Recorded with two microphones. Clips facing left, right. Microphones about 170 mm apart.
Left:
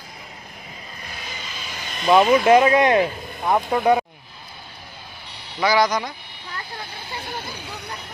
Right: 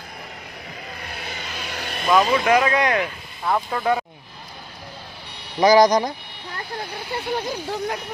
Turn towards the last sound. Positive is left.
turn(degrees=-70)  # may be behind; listen again after turning